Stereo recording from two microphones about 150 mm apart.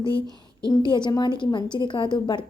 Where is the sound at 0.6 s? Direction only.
30° left (ahead or behind).